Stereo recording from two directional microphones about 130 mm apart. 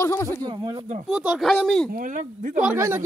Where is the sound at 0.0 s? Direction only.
20° left (ahead or behind).